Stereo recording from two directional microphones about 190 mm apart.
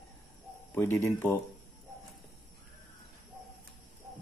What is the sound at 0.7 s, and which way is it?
Speech, 10° left (ahead or behind).